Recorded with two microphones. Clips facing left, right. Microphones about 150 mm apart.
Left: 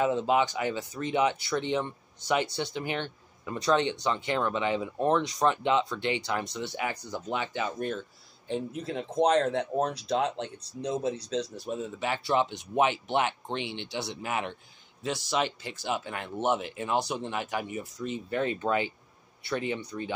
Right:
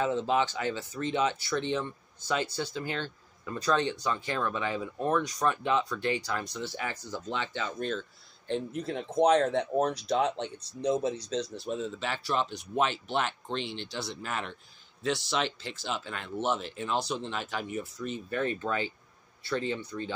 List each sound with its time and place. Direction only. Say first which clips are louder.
0.0 s speech: left 2 dB; 15° left (ahead or behind)
11.5 s speech: right 1 dB; 10° left (ahead or behind)